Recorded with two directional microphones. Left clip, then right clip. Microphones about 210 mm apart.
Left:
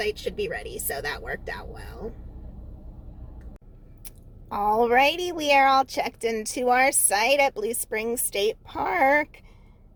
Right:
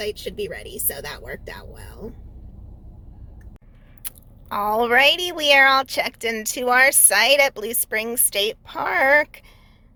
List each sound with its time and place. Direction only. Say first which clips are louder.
0.0 s speech: even; 10° right (ahead or behind)
4.0 s speech: right 10 dB; 5° left (ahead or behind)